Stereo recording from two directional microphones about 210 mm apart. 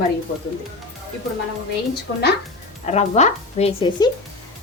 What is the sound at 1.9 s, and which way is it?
Speech, 50° left (ahead or behind).